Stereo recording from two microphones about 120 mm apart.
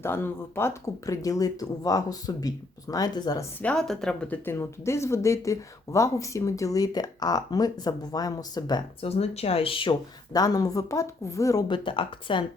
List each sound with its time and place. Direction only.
0.0 s speech: 20° left (ahead or behind); by 3.4 s 35° left (ahead or behind)
3.6 s speech: 5° left (ahead or behind); by 8.8 s 35° left (ahead or behind)
9.0 s speech: 55° left (ahead or behind)
10.3 s speech: 30° left (ahead or behind)
11.7 s speech: 45° left (ahead or behind)